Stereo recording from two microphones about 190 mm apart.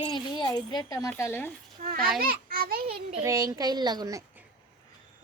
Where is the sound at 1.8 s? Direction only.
50° right (ahead or behind).